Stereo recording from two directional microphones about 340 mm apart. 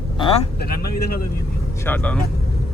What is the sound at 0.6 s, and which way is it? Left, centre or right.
Speech, left.